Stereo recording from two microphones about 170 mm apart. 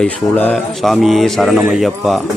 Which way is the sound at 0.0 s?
5° left (ahead or behind).